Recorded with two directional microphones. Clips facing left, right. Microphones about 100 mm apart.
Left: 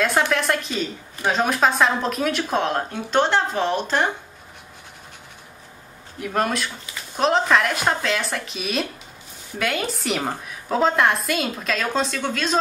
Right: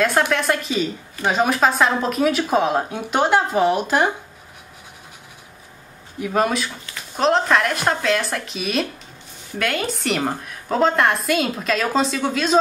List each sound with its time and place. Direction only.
0.3 s a woman's voice: centre (ahead or behind)
6.1 s a woman's voice: centre (ahead or behind)